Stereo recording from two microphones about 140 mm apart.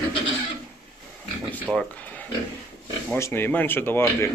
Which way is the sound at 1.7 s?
25° right (ahead or behind).